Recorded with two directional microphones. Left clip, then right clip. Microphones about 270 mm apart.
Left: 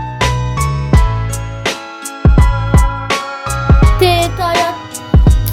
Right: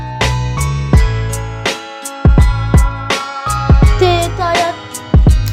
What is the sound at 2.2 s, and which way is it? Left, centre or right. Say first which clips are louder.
Music: left 2 dB; centre.